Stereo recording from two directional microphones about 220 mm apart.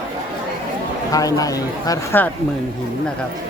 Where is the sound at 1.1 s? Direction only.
15° left (ahead or behind).